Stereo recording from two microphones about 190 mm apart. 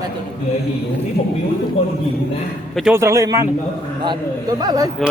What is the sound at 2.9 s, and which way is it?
Speech, 15° right (ahead or behind).